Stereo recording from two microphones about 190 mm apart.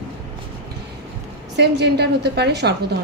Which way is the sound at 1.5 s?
60° right (ahead or behind).